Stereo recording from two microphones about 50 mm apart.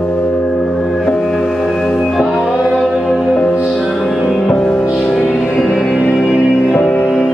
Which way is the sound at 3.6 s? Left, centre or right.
Centre.